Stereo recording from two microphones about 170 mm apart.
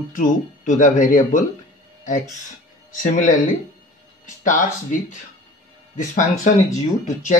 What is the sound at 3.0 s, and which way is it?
Speech, 50° left (ahead or behind).